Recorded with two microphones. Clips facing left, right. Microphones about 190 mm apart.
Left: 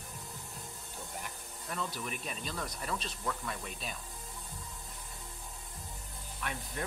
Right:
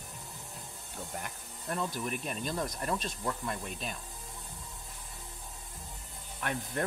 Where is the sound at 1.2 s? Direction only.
50° right (ahead or behind).